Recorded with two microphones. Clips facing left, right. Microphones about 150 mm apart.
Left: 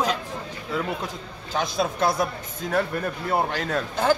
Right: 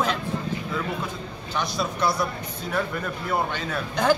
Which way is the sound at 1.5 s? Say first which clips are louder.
Left 3 dB; 50° left (ahead or behind).